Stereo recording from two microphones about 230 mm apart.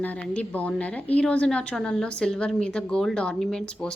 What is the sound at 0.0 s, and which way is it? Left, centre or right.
A woman's voice, centre.